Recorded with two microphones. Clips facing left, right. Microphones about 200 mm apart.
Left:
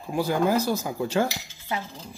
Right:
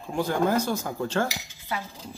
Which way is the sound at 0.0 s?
10° left (ahead or behind).